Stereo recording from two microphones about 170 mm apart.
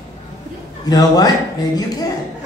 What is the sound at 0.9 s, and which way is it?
Speech, 20° left (ahead or behind).